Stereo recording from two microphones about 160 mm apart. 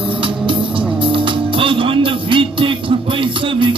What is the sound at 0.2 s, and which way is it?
Music, 30° right (ahead or behind).